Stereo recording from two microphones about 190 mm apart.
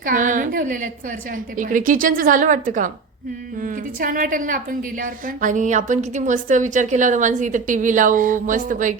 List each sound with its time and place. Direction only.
0.0 s a woman's voice: 45° right (ahead or behind)